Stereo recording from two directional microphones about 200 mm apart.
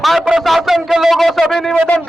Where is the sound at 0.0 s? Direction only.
Centre (ahead or behind).